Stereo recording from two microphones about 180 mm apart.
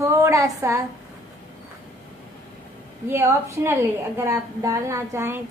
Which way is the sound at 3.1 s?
15° right (ahead or behind).